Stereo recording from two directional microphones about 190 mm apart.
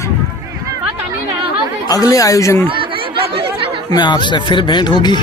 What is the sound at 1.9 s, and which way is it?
Speech, 20° left (ahead or behind).